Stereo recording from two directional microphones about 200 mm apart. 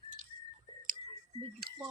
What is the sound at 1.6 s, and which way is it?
Chewing, 50° right (ahead or behind).